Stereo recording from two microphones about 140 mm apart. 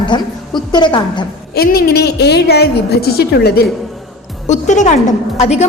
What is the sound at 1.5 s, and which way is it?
Speech, 90° left.